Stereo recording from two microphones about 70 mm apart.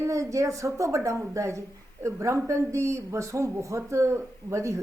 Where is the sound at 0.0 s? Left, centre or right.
Right.